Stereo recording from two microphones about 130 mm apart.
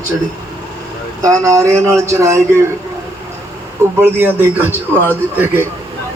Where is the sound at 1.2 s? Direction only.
25° right (ahead or behind).